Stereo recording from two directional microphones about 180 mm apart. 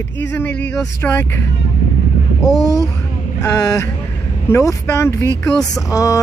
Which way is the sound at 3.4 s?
20° left (ahead or behind).